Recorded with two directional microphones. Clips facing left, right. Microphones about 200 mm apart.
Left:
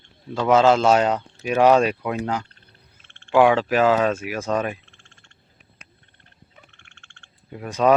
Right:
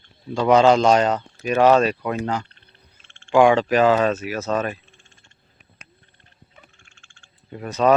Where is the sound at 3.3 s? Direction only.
5° left (ahead or behind).